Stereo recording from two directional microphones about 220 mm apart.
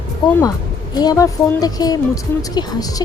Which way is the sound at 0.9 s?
15° left (ahead or behind).